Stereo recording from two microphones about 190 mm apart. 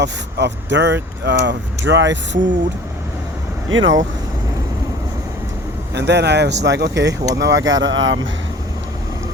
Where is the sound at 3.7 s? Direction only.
85° right.